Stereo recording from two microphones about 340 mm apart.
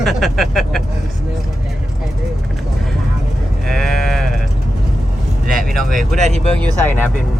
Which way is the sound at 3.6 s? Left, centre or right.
Centre.